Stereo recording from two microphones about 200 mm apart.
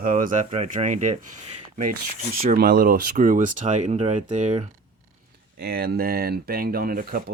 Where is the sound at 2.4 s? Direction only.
50° right (ahead or behind).